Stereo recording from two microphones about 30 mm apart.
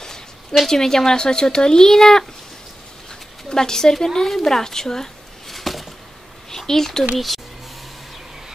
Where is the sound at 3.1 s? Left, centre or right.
Left.